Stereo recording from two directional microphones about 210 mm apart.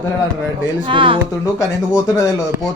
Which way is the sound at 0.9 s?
25° right (ahead or behind).